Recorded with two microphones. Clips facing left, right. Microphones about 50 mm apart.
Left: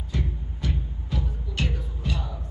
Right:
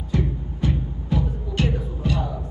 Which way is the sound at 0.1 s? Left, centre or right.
Right.